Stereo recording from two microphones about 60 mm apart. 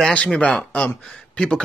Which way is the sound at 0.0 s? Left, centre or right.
Centre.